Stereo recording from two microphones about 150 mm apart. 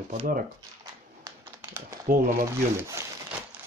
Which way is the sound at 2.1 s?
65° right (ahead or behind).